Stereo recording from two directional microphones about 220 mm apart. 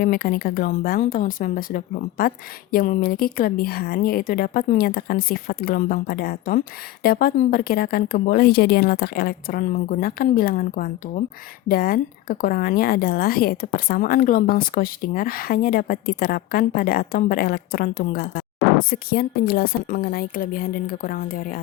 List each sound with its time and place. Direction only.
0.0 s a woman's voice: 40° left (ahead or behind)